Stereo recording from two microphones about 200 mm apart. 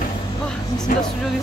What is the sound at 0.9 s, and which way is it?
Speech, 45° left (ahead or behind).